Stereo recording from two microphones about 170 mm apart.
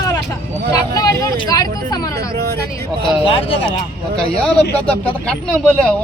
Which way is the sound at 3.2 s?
35° left (ahead or behind).